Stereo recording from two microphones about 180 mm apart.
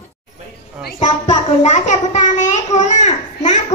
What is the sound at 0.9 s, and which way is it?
Speech, 40° left (ahead or behind).